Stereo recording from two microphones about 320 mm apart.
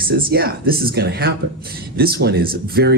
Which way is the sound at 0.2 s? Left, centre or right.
Right.